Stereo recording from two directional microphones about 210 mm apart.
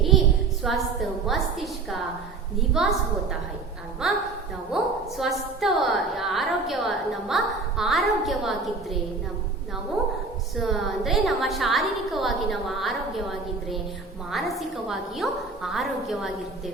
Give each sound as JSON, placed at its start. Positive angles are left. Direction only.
{"t": 0.7, "sound": "a woman's voice", "side_deg": 0}
{"t": 4.0, "sound": "a woman's voice", "side_deg": 0}
{"t": 10.6, "sound": "a woman's voice", "side_deg": 0}
{"t": 14.3, "sound": "a woman's voice", "side_deg": 0}